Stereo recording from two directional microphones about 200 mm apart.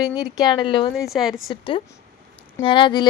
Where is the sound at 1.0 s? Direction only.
Centre (ahead or behind).